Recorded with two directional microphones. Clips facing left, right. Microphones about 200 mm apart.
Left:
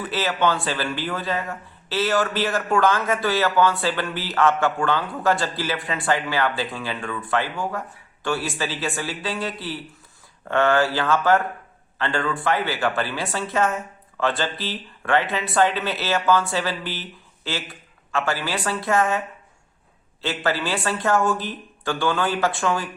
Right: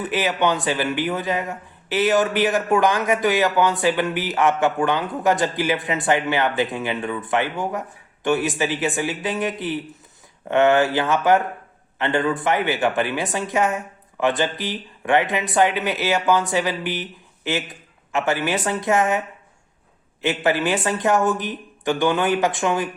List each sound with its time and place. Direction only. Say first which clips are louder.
0.0 s speech: right 2 dB; 15° right (ahead or behind)
20.2 s speech: right 4 dB; 15° right (ahead or behind)